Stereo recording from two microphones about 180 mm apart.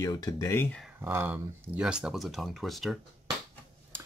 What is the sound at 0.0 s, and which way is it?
Speech, 20° left (ahead or behind).